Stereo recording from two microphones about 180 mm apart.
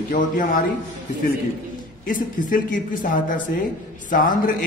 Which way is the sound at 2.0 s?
50° left (ahead or behind).